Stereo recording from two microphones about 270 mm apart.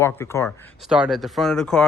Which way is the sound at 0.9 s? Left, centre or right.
Centre.